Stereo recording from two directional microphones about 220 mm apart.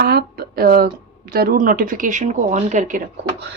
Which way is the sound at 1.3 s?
45° right (ahead or behind).